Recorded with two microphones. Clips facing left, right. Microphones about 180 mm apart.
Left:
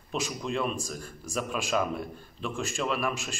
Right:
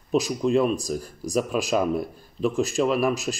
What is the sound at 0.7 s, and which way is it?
Speech, 40° right (ahead or behind).